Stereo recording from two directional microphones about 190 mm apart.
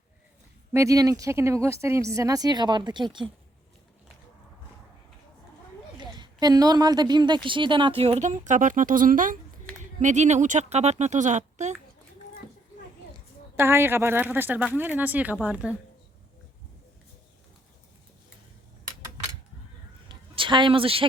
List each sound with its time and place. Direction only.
0.7 s speech: 15° right (ahead or behind)
6.0 s a woman's voice: 20° right (ahead or behind); by 11.7 s 40° right (ahead or behind)
13.6 s speech: 10° right (ahead or behind)
20.1 s a sound: 25° right (ahead or behind)